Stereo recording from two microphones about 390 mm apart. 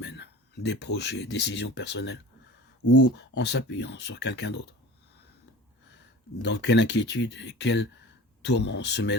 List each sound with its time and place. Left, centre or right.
0.0 s speech: left
2.8 s speech: left
3.2 s speech: left
6.4 s speech: left